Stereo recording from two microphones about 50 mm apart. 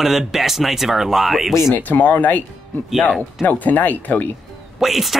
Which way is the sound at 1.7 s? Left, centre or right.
Left.